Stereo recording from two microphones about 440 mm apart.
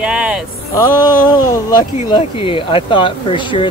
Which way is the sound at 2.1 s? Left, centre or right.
Centre.